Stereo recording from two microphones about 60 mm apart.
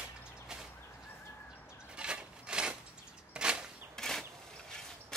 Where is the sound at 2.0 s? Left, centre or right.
Centre.